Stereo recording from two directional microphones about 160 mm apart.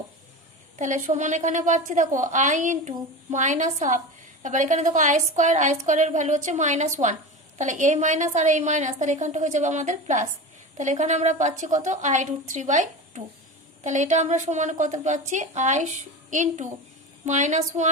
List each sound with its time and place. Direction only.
0.8 s a woman's voice: 55° right (ahead or behind)